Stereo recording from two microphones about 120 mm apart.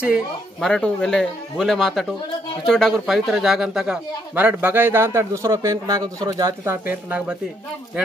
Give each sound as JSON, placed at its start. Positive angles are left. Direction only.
{"t": 0.0, "sound": "a man's voice", "side_deg": -5}
{"t": 0.7, "sound": "a man's voice", "side_deg": 5}
{"t": 6.6, "sound": "a man's voice", "side_deg": -20}